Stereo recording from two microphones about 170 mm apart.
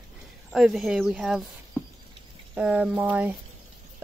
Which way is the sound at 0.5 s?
Centre (ahead or behind).